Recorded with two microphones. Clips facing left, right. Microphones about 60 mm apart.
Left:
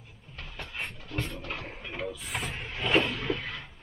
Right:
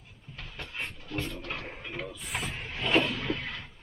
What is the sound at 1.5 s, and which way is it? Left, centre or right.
Speech, centre.